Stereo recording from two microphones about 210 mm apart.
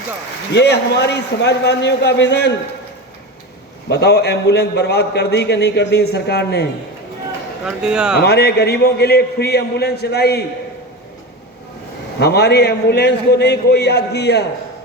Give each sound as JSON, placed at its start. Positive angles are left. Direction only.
{"t": 0.5, "sound": "a man's voice", "side_deg": 55}
{"t": 3.8, "sound": "a man's voice", "side_deg": 50}
{"t": 7.8, "sound": "speech", "side_deg": -5}
{"t": 8.2, "sound": "a man's voice", "side_deg": 50}
{"t": 12.2, "sound": "a man's voice", "side_deg": 50}